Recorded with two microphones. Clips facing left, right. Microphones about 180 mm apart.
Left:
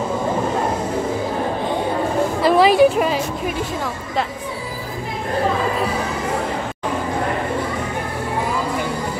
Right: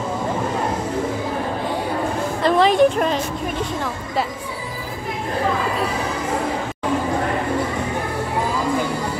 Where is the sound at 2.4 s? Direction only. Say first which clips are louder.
Left 2 dB; 5° left (ahead or behind).